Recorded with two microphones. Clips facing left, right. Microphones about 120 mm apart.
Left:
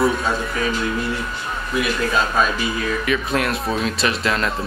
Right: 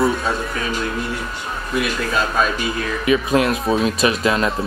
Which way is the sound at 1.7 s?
Centre (ahead or behind).